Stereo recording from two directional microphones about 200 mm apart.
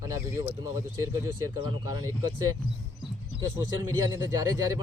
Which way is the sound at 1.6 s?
20° right (ahead or behind).